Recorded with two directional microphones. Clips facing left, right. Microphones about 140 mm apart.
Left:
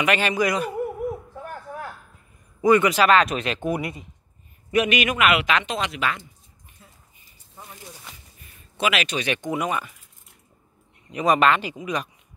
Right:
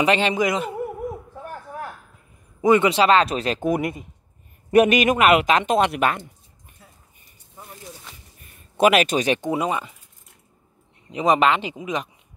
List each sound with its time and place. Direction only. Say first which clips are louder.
0.0 s speech: right 2 dB; 25° right (ahead or behind)
2.6 s speech: right 1 dB; 25° right (ahead or behind); by 6.2 s 50° right (ahead or behind)
8.7 s speech: right 7 dB; 45° right (ahead or behind); by 9.9 s 20° right (ahead or behind)
11.1 s speech: right 1 dB; 20° right (ahead or behind)